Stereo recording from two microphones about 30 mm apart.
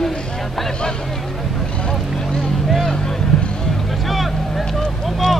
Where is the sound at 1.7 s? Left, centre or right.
Left.